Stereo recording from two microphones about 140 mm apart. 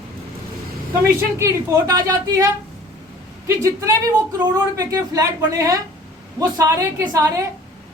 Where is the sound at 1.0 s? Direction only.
20° right (ahead or behind).